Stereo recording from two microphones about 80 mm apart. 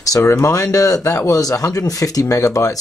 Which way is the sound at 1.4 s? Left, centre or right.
Left.